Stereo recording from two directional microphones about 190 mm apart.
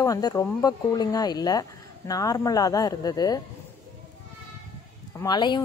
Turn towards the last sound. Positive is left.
turn(degrees=25)  # may be behind; listen again after turning